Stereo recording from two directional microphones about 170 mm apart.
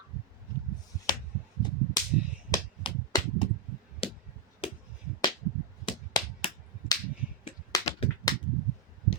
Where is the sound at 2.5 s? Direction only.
25° left (ahead or behind).